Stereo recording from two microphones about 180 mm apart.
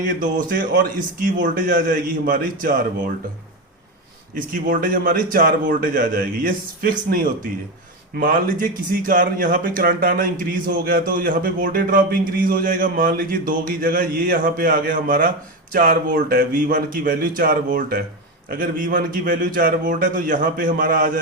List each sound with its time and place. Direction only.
0.0 s speech: 50° right (ahead or behind)
4.4 s speech: 50° right (ahead or behind)